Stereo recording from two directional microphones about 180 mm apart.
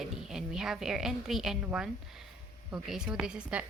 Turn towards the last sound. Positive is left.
turn(degrees=-5)  # may be behind; listen again after turning